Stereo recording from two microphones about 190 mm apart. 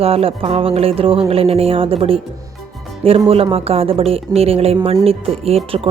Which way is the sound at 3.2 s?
30° right (ahead or behind).